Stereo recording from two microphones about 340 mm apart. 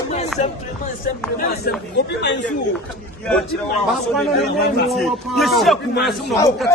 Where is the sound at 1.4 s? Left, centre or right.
Left.